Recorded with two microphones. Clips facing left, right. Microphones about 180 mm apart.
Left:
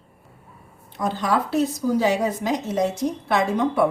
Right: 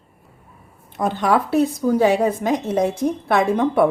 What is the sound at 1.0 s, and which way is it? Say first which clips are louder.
A woman's voice: right 4 dB; 60° right (ahead or behind).